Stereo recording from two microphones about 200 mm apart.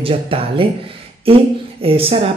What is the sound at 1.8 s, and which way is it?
Speech, 30° right (ahead or behind).